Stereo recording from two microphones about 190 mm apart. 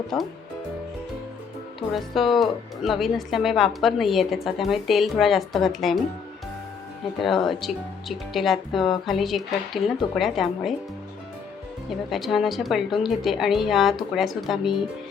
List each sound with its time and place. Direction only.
1.9 s speech: centre (ahead or behind)
7.4 s speech: centre (ahead or behind)
11.9 s speech: centre (ahead or behind)